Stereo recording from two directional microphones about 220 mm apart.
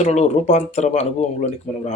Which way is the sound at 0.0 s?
30° left (ahead or behind).